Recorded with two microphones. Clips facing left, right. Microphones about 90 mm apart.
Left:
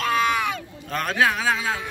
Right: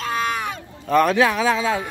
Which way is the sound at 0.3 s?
40° right (ahead or behind).